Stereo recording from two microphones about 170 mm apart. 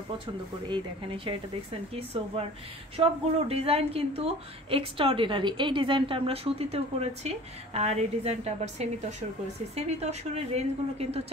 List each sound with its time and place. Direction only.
0.7 s a woman's voice: 30° right (ahead or behind)